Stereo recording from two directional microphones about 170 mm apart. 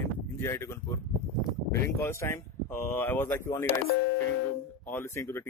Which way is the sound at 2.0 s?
15° left (ahead or behind).